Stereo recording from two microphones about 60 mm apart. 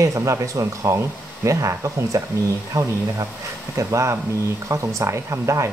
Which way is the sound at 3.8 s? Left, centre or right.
Right.